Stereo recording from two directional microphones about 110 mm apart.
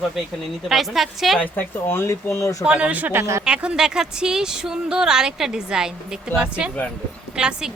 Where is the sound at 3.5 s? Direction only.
10° right (ahead or behind).